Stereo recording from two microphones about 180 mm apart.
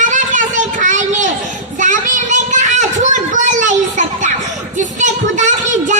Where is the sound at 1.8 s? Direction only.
45° right (ahead or behind).